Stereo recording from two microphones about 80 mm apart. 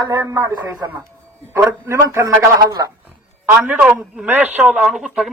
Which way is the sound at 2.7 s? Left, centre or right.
Right.